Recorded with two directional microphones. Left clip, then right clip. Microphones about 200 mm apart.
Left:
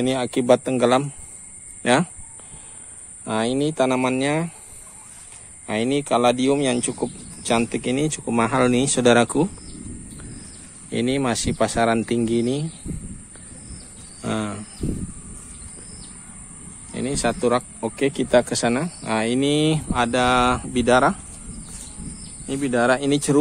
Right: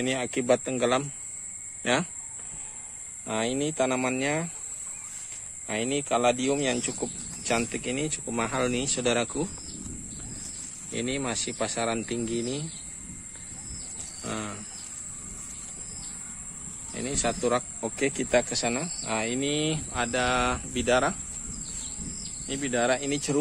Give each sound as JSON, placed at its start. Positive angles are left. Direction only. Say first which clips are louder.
{"t": 0.0, "sound": "speech", "louder": "left 6 dB", "side_deg": 25}
{"t": 3.3, "sound": "speech", "louder": "left 6 dB", "side_deg": 30}
{"t": 5.7, "sound": "speech", "louder": "left 6 dB", "side_deg": 35}
{"t": 10.9, "sound": "speech", "louder": "left 8 dB", "side_deg": 35}
{"t": 14.2, "sound": "cricket", "louder": "left 8 dB", "side_deg": 30}
{"t": 16.9, "sound": "speech", "louder": "left 6 dB", "side_deg": 35}
{"t": 18.3, "sound": "speech", "louder": "left 8 dB", "side_deg": 35}
{"t": 22.5, "sound": "speech", "louder": "left 7 dB", "side_deg": 40}